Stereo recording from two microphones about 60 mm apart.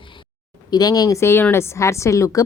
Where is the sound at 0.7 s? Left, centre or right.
Left.